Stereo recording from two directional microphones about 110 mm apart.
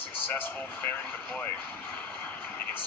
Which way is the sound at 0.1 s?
15° left (ahead or behind).